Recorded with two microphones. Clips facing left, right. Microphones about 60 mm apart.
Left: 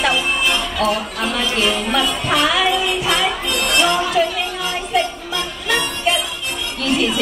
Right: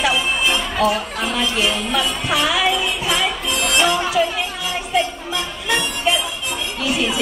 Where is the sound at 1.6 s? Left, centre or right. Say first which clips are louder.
Left 4 dB; centre.